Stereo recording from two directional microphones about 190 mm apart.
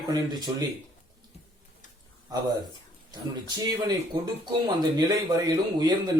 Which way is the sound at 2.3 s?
20° right (ahead or behind).